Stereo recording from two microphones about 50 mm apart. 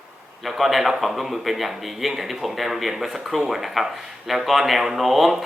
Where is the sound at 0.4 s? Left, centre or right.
Centre.